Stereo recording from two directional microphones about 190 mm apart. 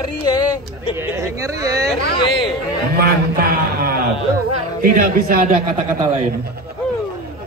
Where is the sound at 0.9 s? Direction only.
15° right (ahead or behind).